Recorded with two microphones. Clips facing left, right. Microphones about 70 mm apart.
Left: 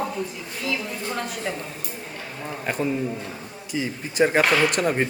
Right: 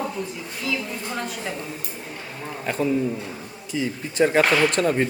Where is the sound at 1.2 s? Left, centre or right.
Centre.